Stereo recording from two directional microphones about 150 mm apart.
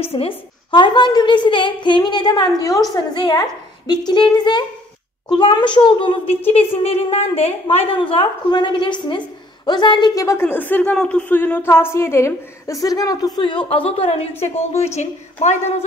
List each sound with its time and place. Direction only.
0.1 s a woman's voice: 35° left (ahead or behind)